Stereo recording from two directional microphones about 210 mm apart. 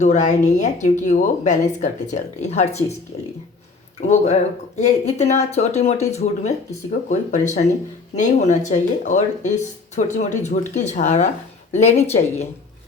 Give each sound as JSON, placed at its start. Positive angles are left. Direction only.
{"t": 0.0, "sound": "speech", "side_deg": 35}
{"t": 4.0, "sound": "speech", "side_deg": 30}